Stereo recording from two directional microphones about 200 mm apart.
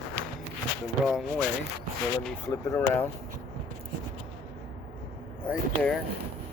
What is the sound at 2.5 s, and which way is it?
Speech, 15° left (ahead or behind).